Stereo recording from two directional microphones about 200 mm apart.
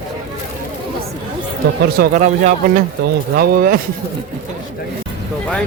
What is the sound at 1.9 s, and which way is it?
Speech, 40° right (ahead or behind).